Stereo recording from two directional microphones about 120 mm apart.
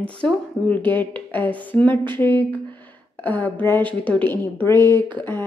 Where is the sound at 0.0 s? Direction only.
10° left (ahead or behind).